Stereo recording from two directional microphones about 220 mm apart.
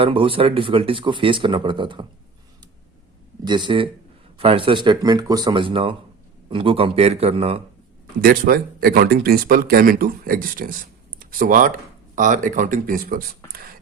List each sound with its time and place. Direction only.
0.0 s speech: 25° right (ahead or behind)
3.4 s speech: 20° right (ahead or behind)
8.2 s speech: 40° right (ahead or behind)